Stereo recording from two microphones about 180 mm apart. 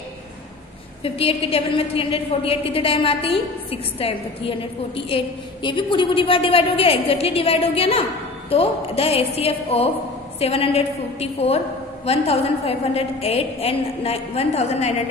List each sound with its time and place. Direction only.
1.0 s a woman's voice: 30° left (ahead or behind)